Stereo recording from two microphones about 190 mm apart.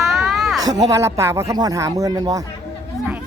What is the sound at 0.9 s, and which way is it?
Speech, 15° right (ahead or behind).